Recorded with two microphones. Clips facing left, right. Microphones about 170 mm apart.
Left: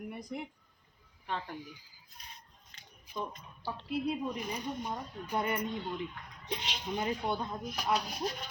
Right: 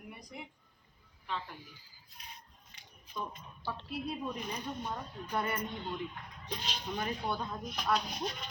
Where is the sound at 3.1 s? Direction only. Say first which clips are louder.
Left 2 dB; 10° left (ahead or behind).